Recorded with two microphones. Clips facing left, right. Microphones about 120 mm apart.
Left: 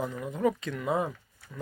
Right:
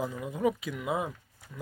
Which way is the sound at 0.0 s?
15° right (ahead or behind).